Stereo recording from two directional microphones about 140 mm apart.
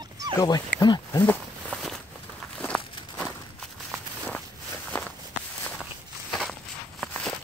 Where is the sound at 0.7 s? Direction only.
30° left (ahead or behind).